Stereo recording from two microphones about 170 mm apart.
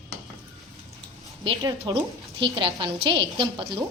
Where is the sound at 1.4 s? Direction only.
25° right (ahead or behind).